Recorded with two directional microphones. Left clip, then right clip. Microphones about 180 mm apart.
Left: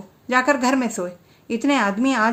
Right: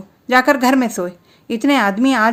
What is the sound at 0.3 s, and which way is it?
A woman's voice, 40° right (ahead or behind).